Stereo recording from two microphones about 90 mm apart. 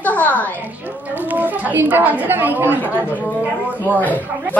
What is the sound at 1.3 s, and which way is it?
A woman's voice, 20° right (ahead or behind).